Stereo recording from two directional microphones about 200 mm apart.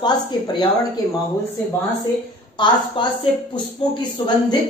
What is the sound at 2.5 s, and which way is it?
Speech, 20° left (ahead or behind).